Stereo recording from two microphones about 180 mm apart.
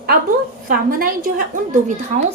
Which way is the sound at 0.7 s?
55° right (ahead or behind).